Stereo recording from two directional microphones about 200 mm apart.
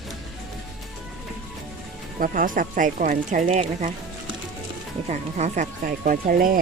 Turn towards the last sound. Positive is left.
turn(degrees=-45)  # may be behind; listen again after turning